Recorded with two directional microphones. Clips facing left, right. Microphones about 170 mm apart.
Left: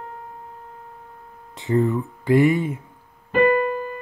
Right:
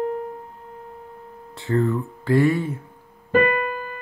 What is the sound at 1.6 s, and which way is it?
Speech, 20° left (ahead or behind).